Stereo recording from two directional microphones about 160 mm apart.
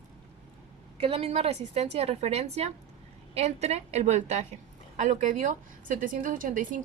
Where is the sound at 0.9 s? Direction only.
35° right (ahead or behind).